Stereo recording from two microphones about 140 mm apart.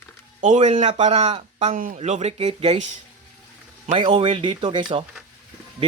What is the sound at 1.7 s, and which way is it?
Speech, 75° right (ahead or behind).